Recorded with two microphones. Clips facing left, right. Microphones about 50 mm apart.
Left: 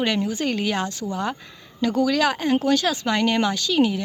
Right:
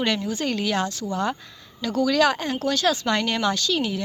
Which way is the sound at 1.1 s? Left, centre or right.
Centre.